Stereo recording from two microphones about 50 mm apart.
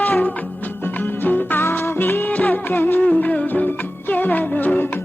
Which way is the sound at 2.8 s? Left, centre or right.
Left.